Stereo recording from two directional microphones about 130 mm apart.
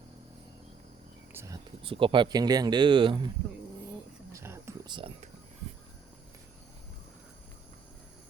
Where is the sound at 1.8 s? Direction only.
45° right (ahead or behind).